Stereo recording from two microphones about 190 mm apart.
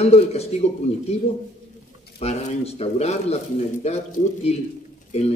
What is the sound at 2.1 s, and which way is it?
Speech, 30° left (ahead or behind).